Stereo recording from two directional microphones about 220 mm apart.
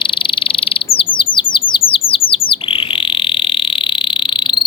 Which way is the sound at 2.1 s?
25° left (ahead or behind).